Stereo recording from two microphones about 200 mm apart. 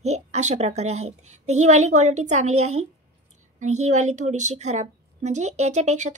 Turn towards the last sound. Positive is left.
turn(degrees=-35)  # may be behind; listen again after turning